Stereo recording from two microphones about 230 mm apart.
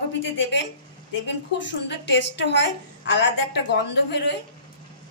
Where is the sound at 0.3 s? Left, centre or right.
Left.